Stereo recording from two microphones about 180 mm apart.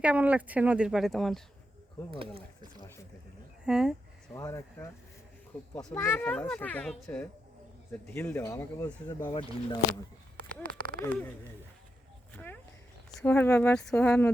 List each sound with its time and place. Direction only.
0.0 s speech: 5° right (ahead or behind)
2.0 s speech: 30° right (ahead or behind)
3.7 s speech: 5° right (ahead or behind)
4.4 s speech: 15° left (ahead or behind)
9.3 s speech: 30° left (ahead or behind)
11.0 s speech: 10° left (ahead or behind)
12.3 s a sound: 10° left (ahead or behind)
13.1 s speech: 5° left (ahead or behind)